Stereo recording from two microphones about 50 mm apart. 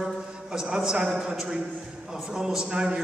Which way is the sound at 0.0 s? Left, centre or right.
Centre.